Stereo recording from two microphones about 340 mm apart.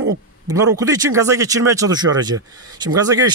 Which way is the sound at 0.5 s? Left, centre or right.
Centre.